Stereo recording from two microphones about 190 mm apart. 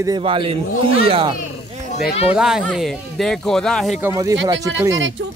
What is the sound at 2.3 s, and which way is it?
Speech, 5° right (ahead or behind).